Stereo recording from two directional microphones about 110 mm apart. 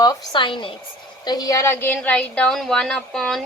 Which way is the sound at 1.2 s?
35° left (ahead or behind).